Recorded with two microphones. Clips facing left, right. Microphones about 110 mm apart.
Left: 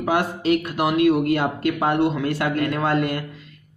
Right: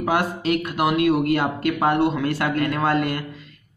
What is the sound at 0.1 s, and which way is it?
A man's voice, 25° left (ahead or behind).